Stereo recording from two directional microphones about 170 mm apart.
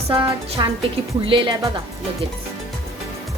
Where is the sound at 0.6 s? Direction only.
25° right (ahead or behind).